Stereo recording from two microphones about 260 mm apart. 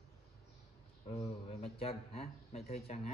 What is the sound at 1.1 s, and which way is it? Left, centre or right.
Speech, left.